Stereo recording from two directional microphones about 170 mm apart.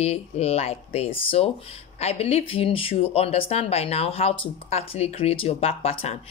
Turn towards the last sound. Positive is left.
turn(degrees=35)  # may be behind; listen again after turning